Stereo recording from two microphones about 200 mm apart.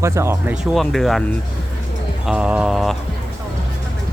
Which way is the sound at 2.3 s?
5° right (ahead or behind).